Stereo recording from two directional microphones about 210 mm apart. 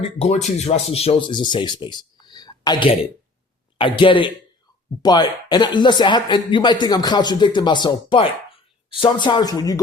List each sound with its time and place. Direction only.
0.0 s speech: 30° left (ahead or behind)